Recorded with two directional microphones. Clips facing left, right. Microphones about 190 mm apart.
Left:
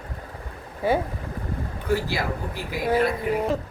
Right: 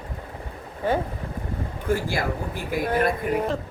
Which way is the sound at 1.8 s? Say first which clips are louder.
Even; 50° right (ahead or behind).